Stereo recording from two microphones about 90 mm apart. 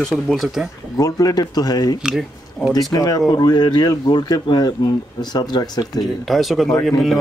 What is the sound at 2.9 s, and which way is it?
Speech, 45° left (ahead or behind).